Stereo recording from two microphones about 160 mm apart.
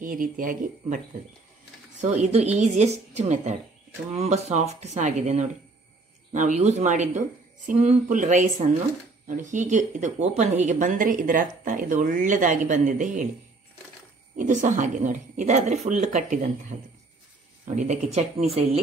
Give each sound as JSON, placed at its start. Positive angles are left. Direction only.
{"t": 0.0, "sound": "speech", "side_deg": -60}
{"t": 2.0, "sound": "speech", "side_deg": -45}
{"t": 14.3, "sound": "speech", "side_deg": -55}